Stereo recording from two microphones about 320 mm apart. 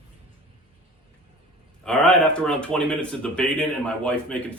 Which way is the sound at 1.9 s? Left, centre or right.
Centre.